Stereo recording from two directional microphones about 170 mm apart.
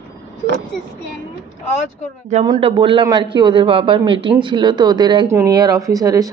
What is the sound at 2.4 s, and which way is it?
Speech, 30° right (ahead or behind).